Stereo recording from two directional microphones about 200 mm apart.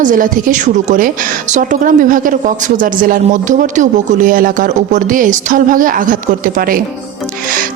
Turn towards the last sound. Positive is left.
turn(degrees=-45)  # may be behind; listen again after turning